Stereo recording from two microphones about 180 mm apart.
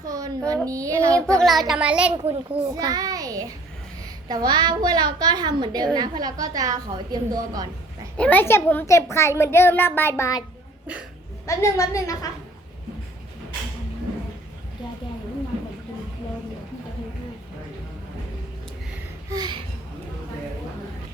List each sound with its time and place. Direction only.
0.0 s speech: 20° right (ahead or behind)
1.4 s a child's voice: centre (ahead or behind)
2.7 s a child's voice: 20° right (ahead or behind)
8.1 s a child's voice: 10° left (ahead or behind)
11.4 s a child's voice: 20° left (ahead or behind)
19.3 s speech: 20° right (ahead or behind)